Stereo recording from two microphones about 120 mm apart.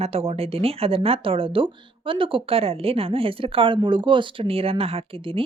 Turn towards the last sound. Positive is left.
turn(degrees=-50)  # may be behind; listen again after turning